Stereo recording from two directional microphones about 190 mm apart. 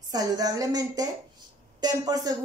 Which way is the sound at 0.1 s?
20° right (ahead or behind).